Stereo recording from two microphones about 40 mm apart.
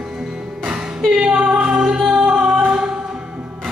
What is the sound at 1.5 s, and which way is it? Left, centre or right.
Music, right.